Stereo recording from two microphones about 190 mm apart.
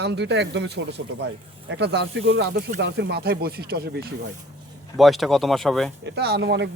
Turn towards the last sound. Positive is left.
turn(degrees=-65)  # may be behind; listen again after turning